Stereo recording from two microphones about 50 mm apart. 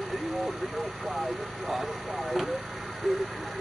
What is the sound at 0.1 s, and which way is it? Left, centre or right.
Speech, centre.